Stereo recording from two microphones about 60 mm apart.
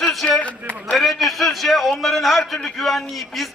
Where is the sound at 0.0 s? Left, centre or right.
Centre.